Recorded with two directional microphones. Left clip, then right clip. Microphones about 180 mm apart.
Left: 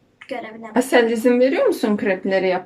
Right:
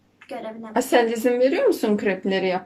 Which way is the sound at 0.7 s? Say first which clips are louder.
Left 3 dB; 5° right (ahead or behind).